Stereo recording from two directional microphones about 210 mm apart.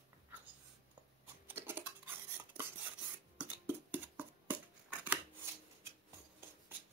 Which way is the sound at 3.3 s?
10° right (ahead or behind).